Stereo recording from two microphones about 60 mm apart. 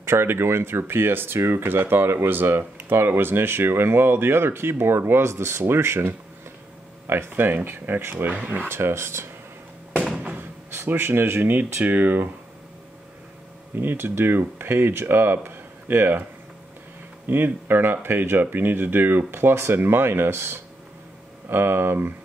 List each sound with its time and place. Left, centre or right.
0.0 s speech: right
8.6 s speech: right
9.9 s a sound: centre
10.7 s speech: right
11.5 s speech: right
13.7 s speech: right
17.3 s speech: right